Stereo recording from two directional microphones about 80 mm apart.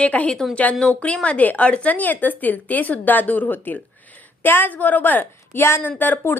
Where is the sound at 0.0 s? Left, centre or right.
Centre.